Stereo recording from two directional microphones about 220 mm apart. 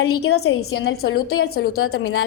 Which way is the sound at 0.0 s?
80° left.